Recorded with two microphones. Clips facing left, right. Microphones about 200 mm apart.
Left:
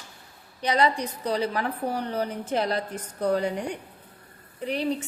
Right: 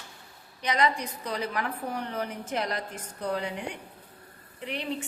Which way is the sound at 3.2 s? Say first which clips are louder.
Left 6 dB; 40° left (ahead or behind).